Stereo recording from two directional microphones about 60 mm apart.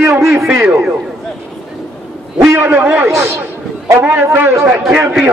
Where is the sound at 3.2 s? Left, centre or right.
Right.